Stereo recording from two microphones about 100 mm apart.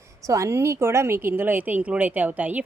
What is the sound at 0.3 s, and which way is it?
A woman's voice, 30° right (ahead or behind).